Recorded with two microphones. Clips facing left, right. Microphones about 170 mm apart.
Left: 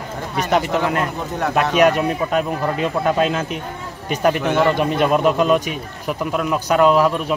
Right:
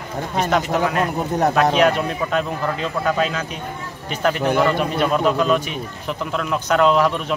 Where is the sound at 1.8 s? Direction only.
15° left (ahead or behind).